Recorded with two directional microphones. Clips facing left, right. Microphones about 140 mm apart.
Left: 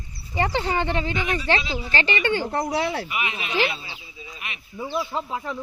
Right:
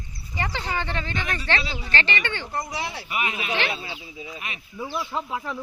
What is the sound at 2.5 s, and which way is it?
Speech, 65° left (ahead or behind).